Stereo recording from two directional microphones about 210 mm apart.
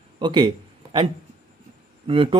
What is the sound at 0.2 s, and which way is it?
Speech, 20° right (ahead or behind).